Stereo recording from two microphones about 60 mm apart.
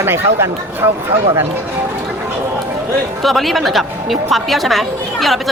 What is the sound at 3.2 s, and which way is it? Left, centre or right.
A woman's voice, centre.